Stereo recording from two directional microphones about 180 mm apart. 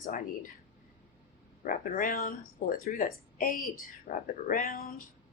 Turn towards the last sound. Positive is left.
turn(degrees=55)  # may be behind; listen again after turning